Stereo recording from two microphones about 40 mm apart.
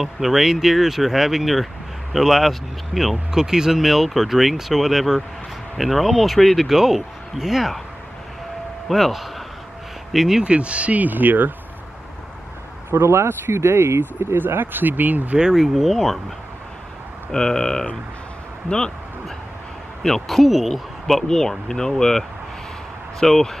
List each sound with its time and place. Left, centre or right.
0.0 s speech: centre
3.3 s speech: centre
6.7 s speech: centre
8.8 s speech: centre
10.4 s speech: right
11.0 s speech: right
12.9 s speech: right
15.5 s speech: centre
17.3 s speech: centre
20.0 s speech: centre
21.1 s speech: centre